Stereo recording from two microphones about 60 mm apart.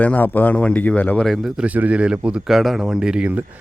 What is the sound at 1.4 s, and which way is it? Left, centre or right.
Speech, centre.